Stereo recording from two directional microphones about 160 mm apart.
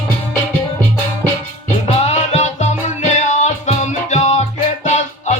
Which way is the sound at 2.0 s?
45° left (ahead or behind).